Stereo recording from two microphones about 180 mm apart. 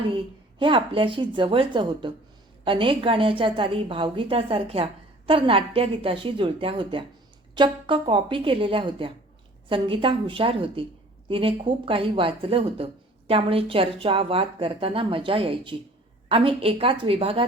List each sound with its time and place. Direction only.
0.6 s a woman's voice: 30° right (ahead or behind)